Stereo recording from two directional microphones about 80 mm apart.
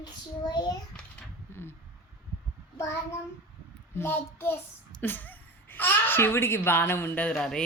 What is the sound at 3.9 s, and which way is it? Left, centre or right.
A child's voice, left.